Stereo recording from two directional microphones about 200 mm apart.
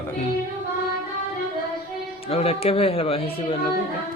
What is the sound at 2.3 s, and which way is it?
Speech, 30° left (ahead or behind).